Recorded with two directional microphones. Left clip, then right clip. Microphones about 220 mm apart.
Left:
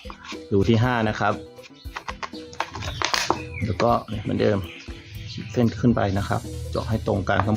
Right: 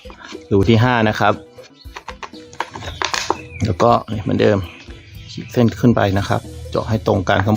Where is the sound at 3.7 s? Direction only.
40° right (ahead or behind).